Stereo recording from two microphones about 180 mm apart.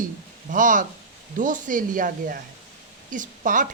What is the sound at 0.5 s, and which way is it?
Speech, 45° right (ahead or behind).